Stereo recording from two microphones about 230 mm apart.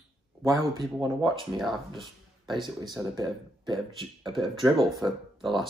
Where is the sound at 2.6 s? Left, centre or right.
Centre.